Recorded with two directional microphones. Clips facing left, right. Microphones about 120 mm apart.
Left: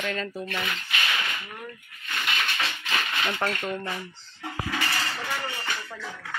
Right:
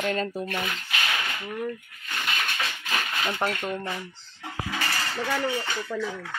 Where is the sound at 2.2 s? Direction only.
45° right (ahead or behind).